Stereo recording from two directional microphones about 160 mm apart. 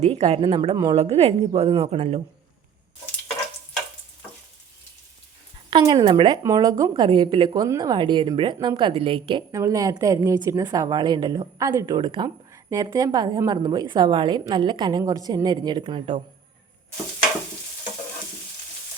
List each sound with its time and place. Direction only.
0.0 s a woman's voice: 40° right (ahead or behind)
5.7 s a woman's voice: 30° right (ahead or behind)
6.4 s a woman's voice: 20° right (ahead or behind)